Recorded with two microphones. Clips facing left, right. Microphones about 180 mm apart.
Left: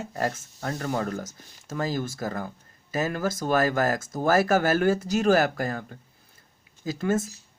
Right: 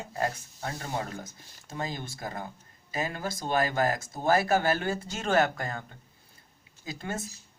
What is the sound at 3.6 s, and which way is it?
Speech, 45° left (ahead or behind).